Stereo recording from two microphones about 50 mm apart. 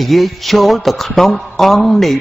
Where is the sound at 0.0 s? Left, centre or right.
Centre.